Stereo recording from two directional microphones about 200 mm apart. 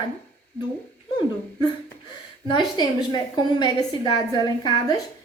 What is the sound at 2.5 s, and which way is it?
A woman's voice, 20° left (ahead or behind).